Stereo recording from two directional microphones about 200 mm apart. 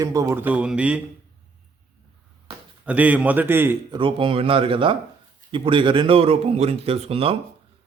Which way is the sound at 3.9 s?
25° right (ahead or behind).